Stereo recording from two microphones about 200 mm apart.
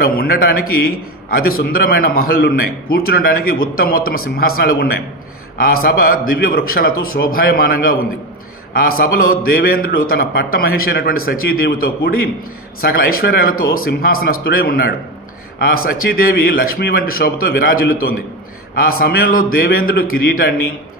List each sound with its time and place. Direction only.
0.0 s a man's voice: 50° left (ahead or behind)